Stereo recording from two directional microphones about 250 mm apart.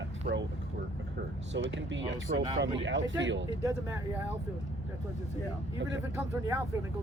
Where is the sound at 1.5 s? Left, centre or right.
Right.